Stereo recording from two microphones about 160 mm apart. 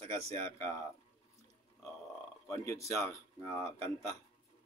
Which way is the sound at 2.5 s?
20° left (ahead or behind).